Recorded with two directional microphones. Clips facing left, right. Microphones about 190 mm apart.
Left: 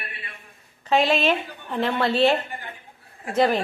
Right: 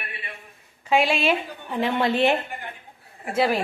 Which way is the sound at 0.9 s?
10° right (ahead or behind).